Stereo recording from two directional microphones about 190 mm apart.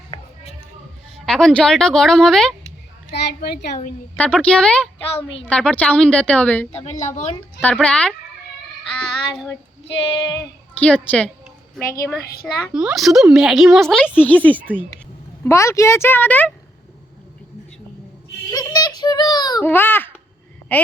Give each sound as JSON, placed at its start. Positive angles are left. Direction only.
{"t": 1.2, "sound": "a woman's voice", "side_deg": 5}
{"t": 3.2, "sound": "a woman's voice", "side_deg": 60}
{"t": 4.2, "sound": "a woman's voice", "side_deg": 5}
{"t": 9.8, "sound": "female singing", "side_deg": 20}
{"t": 10.8, "sound": "a woman's voice", "side_deg": 5}
{"t": 12.7, "sound": "a woman's voice", "side_deg": 0}
{"t": 18.5, "sound": "a child's voice", "side_deg": 20}